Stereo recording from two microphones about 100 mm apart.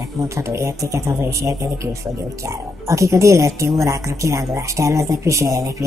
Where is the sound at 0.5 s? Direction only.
30° right (ahead or behind).